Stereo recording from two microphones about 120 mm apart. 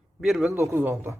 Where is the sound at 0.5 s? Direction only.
20° right (ahead or behind).